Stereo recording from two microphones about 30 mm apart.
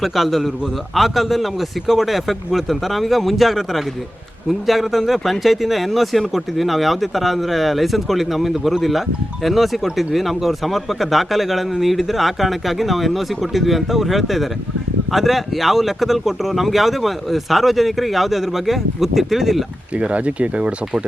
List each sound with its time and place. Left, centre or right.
0.0 s speech: centre
20.0 s speech: right